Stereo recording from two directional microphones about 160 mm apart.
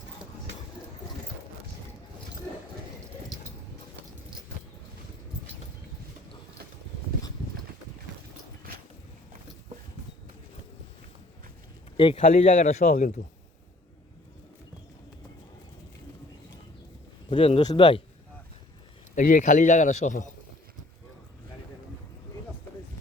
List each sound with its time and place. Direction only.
12.1 s speech: 55° left (ahead or behind)
12.4 s speech: 40° left (ahead or behind)
12.8 s speech: 60° left (ahead or behind)
17.2 s speech: 35° left (ahead or behind)
19.1 s a man's voice: 55° left (ahead or behind)